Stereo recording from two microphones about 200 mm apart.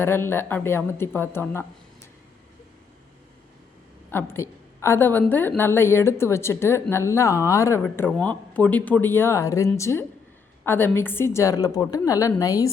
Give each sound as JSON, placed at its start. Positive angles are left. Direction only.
{"t": 0.0, "sound": "a woman's voice", "side_deg": 10}
{"t": 4.1, "sound": "a woman's voice", "side_deg": 10}